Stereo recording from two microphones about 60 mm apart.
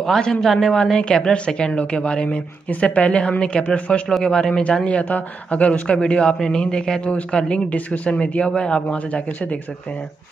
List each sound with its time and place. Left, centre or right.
0.0 s a woman's voice: centre